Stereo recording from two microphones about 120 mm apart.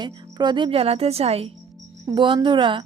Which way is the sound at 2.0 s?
40° right (ahead or behind).